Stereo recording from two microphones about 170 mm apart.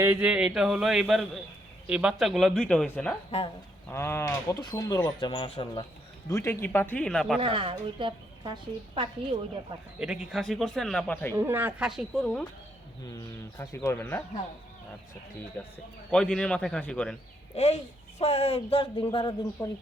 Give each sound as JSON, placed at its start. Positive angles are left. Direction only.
{"t": 0.0, "sound": "speech", "side_deg": -10}
{"t": 6.2, "sound": "speech", "side_deg": 15}
{"t": 7.3, "sound": "speech", "side_deg": -30}
{"t": 10.0, "sound": "speech", "side_deg": -5}
{"t": 11.3, "sound": "speech", "side_deg": -10}
{"t": 13.1, "sound": "speech", "side_deg": 15}
{"t": 15.6, "sound": "speech", "side_deg": 5}
{"t": 17.5, "sound": "speech", "side_deg": 40}